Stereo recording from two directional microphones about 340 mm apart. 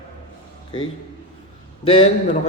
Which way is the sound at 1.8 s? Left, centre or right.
Centre.